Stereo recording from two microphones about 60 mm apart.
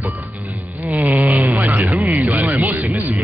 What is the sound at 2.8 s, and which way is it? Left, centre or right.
Music, right.